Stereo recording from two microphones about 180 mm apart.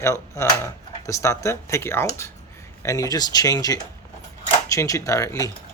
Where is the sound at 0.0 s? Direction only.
15° left (ahead or behind).